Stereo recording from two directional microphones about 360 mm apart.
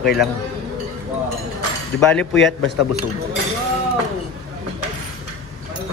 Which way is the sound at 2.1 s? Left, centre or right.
Centre.